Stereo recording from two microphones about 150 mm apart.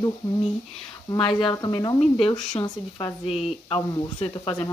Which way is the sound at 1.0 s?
35° left (ahead or behind).